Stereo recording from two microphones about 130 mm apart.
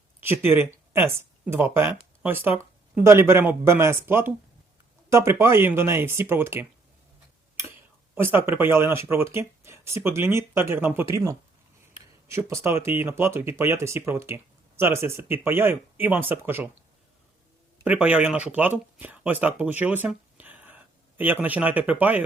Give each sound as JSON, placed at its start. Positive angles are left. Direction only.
{"t": 0.2, "sound": "speech", "side_deg": -15}
{"t": 8.1, "sound": "speech", "side_deg": -15}
{"t": 17.8, "sound": "speech", "side_deg": -10}